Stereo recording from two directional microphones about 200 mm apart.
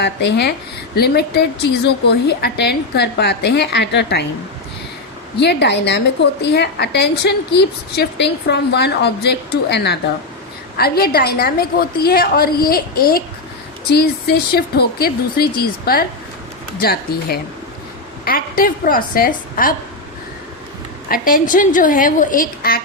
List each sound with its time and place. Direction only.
0.0 s a woman's voice: 60° left (ahead or behind)
5.4 s a woman's voice: 60° left (ahead or behind)
21.1 s a woman's voice: 45° left (ahead or behind)